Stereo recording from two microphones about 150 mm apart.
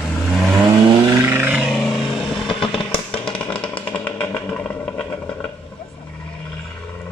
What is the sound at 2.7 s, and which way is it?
Music, 35° left (ahead or behind).